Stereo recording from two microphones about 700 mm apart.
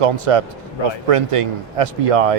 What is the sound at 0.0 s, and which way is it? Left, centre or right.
Speech, right.